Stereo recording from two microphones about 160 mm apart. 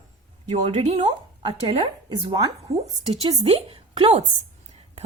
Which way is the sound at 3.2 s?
40° right (ahead or behind).